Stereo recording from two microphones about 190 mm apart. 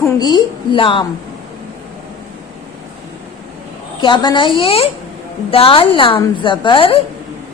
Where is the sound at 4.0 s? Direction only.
25° left (ahead or behind).